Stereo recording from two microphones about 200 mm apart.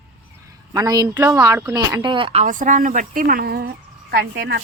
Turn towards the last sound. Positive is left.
turn(degrees=-55)  # may be behind; listen again after turning